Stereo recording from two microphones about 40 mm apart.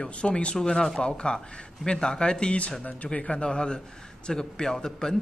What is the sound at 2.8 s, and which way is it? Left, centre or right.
A man's voice, left.